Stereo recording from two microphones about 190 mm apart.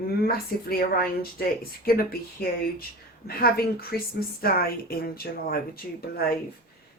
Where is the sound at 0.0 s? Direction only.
50° left (ahead or behind).